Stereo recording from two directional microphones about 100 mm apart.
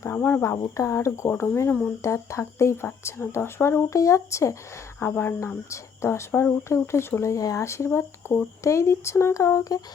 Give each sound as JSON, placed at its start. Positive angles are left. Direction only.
{"t": 0.2, "sound": "speech", "side_deg": 25}